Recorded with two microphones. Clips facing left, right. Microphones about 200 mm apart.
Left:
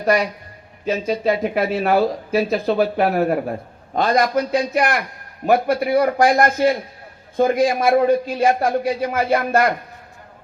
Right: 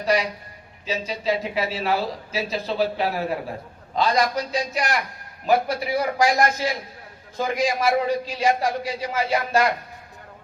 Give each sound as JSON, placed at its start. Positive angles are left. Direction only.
{"t": 0.0, "sound": "a man's voice", "side_deg": 55}